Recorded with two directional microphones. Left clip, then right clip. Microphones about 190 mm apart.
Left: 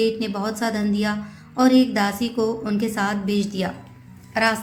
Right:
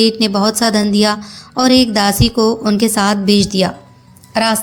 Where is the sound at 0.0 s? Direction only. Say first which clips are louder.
Right 9 dB; 40° right (ahead or behind).